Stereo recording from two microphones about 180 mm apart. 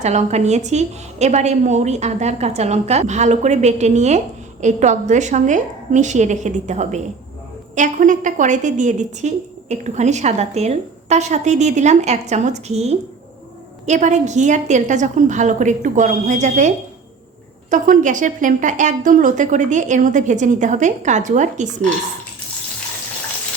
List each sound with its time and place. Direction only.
0.0 s a woman's voice: 40° right (ahead or behind)